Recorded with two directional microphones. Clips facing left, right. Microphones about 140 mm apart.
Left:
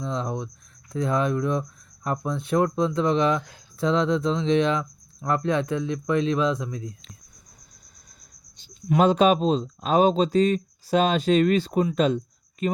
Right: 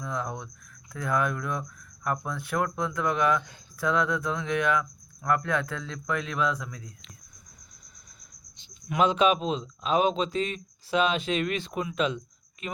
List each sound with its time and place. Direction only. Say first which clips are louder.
0.0 s speech: left 5 dB; 25° left (ahead or behind)
8.5 s speech: left 5 dB; 40° left (ahead or behind)